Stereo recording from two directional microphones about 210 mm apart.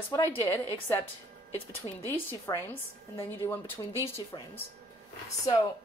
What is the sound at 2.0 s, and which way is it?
Speech, 10° left (ahead or behind).